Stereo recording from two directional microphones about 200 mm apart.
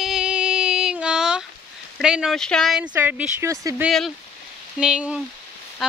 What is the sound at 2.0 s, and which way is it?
Speech, 5° right (ahead or behind).